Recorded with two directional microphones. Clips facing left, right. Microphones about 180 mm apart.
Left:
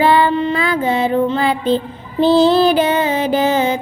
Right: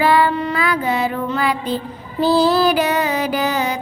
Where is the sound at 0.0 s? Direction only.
25° left (ahead or behind).